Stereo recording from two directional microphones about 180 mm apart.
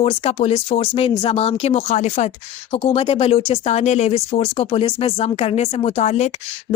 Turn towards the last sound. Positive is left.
turn(degrees=40)  # may be behind; listen again after turning